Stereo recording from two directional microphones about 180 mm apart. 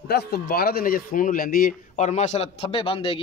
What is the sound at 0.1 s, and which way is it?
A man's voice, 60° left (ahead or behind).